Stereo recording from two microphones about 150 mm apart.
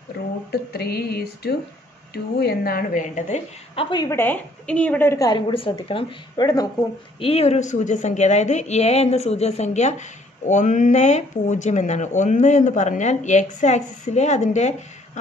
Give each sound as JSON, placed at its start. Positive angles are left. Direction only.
{"t": 0.5, "sound": "a woman's voice", "side_deg": 90}
{"t": 3.7, "sound": "a woman's voice", "side_deg": 40}
{"t": 4.0, "sound": "a woman's voice", "side_deg": 15}
{"t": 5.5, "sound": "speech", "side_deg": 35}
{"t": 7.2, "sound": "a woman's voice", "side_deg": 40}